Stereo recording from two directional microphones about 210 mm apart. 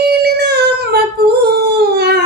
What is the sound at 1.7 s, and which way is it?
Howl, 50° right (ahead or behind).